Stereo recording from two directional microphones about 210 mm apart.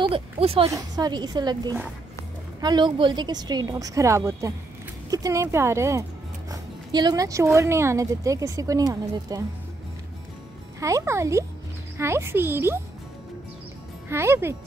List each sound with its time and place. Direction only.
0.0 s a woman's voice: 25° right (ahead or behind)
10.8 s speech: 15° right (ahead or behind)
14.0 s speech: 10° right (ahead or behind)